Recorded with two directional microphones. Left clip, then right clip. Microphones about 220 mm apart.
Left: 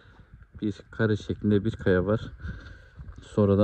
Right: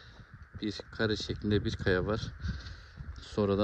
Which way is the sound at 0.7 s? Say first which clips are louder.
Left 4 dB; 15° right (ahead or behind).